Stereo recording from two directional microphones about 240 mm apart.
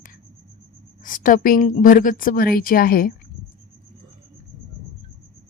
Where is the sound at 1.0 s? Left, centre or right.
Left.